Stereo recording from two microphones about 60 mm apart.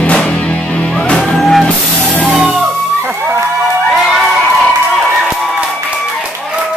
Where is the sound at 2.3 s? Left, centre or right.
Centre.